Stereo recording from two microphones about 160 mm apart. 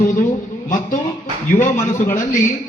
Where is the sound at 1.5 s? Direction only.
50° left (ahead or behind).